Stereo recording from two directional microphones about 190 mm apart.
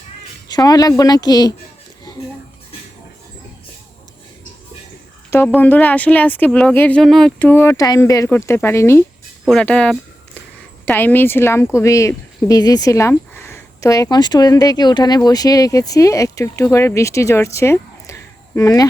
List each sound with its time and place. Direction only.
0.4 s speech: 20° left (ahead or behind)
5.5 s speech: 10° left (ahead or behind)